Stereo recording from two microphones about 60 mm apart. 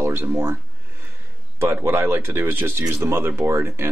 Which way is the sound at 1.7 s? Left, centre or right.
Right.